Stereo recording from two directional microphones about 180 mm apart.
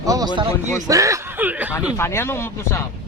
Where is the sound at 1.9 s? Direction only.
15° left (ahead or behind).